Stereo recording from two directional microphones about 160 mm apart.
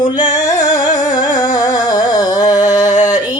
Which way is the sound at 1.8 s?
20° left (ahead or behind).